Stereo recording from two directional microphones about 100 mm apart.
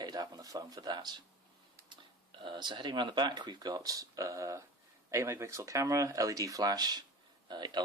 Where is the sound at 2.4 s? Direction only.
50° right (ahead or behind).